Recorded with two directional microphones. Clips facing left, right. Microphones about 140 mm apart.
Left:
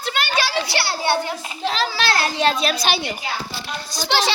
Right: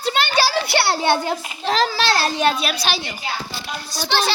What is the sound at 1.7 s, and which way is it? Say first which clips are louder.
Speech: right 4 dB; 40° right (ahead or behind).